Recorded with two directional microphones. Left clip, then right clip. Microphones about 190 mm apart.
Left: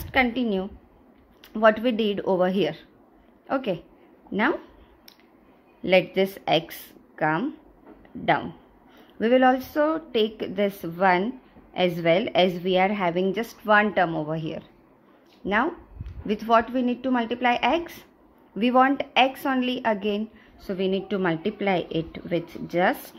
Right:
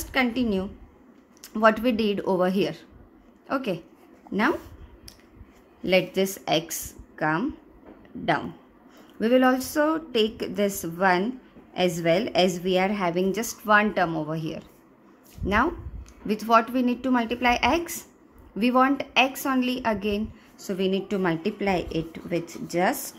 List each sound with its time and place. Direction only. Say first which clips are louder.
0.0 s a woman's voice: left 2 dB; centre (ahead or behind)
5.8 s a woman's voice: left 2 dB; 5° left (ahead or behind)
9.2 s a woman's voice: left 2 dB; 5° left (ahead or behind)